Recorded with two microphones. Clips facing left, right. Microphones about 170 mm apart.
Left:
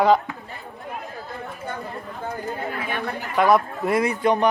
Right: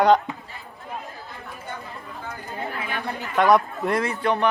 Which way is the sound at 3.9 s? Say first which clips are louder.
Left 4 dB; 15° left (ahead or behind).